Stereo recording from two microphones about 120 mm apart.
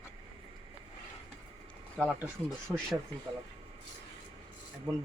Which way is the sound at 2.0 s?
Centre (ahead or behind).